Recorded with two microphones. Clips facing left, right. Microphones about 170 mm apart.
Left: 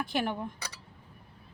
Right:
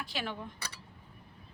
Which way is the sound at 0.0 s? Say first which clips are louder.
Left 7 dB; 50° left (ahead or behind).